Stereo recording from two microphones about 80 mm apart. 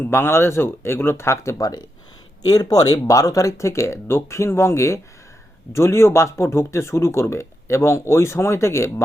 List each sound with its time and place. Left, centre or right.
0.0 s speech: left
1.5 s speech: left